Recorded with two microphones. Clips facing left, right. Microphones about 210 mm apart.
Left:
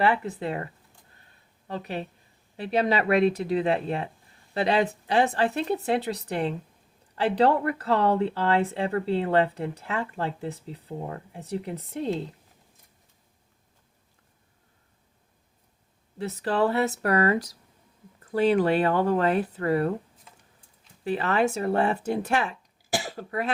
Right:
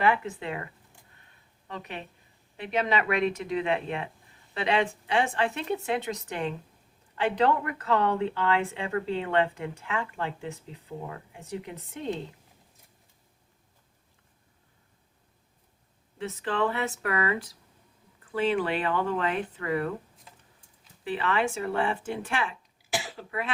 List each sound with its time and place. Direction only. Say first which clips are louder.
0.0 s speech: left 2 dB; 35° left (ahead or behind)
16.1 s speech: left 4 dB; 40° left (ahead or behind)
21.0 s speech: left 4 dB; 40° left (ahead or behind)